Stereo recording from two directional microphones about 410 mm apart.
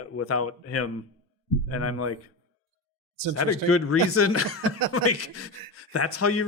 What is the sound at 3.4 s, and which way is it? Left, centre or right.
Speech, left.